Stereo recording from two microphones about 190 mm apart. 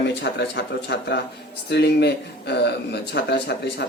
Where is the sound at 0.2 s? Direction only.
65° left (ahead or behind).